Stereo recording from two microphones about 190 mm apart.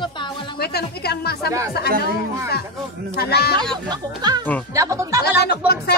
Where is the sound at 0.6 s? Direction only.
55° left (ahead or behind).